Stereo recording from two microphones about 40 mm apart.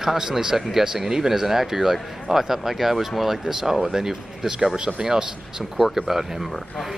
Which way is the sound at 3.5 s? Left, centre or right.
Centre.